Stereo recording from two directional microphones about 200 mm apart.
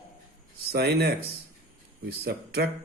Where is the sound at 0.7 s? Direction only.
55° right (ahead or behind).